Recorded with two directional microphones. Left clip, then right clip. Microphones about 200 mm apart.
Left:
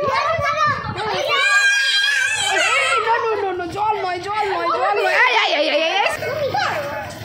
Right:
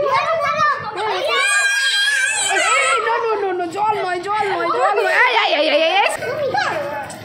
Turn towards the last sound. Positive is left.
turn(degrees=-5)  # may be behind; listen again after turning